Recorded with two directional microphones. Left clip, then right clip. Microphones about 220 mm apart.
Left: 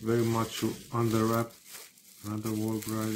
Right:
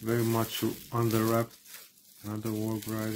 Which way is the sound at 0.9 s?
30° right (ahead or behind).